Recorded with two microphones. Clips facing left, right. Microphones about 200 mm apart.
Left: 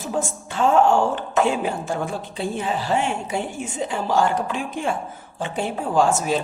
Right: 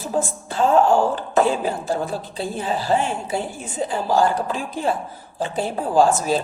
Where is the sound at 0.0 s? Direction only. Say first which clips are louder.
Right 2 dB; 35° right (ahead or behind).